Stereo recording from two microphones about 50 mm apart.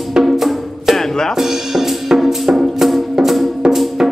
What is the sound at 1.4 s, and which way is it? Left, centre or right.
Music, centre.